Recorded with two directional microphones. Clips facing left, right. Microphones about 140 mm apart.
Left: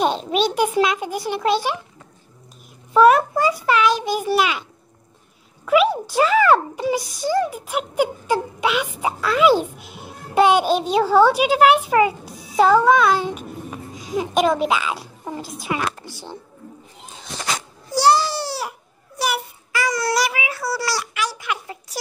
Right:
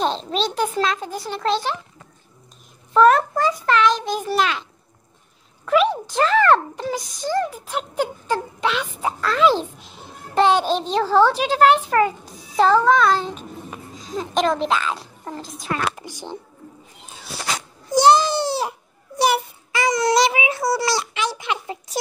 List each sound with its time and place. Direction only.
0.0 s a child's voice: 10° left (ahead or behind)
2.9 s a child's voice: 10° left (ahead or behind)
5.7 s a child's voice: 5° left (ahead or behind)
16.0 s speech: 15° right (ahead or behind)
17.9 s baby cry: 20° right (ahead or behind)